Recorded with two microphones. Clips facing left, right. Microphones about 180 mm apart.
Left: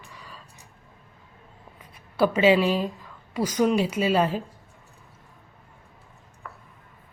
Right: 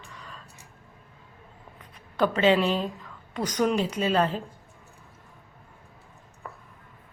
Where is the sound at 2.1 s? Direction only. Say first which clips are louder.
Left 2 dB; 10° left (ahead or behind).